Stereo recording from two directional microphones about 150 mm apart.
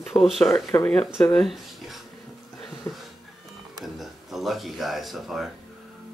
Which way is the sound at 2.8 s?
20° left (ahead or behind).